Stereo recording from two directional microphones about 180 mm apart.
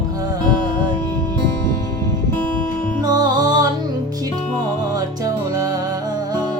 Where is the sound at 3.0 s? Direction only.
20° right (ahead or behind).